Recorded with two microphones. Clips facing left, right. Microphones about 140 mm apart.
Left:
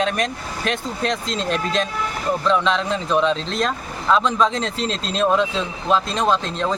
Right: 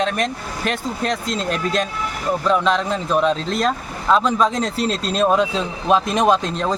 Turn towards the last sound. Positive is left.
turn(degrees=-15)  # may be behind; listen again after turning